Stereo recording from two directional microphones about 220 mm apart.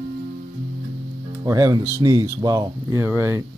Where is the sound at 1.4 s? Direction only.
15° right (ahead or behind).